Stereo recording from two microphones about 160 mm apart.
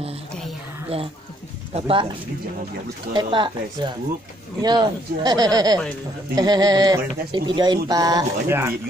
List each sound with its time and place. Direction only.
1.9 s speech: 30° right (ahead or behind); by 8.7 s 15° right (ahead or behind)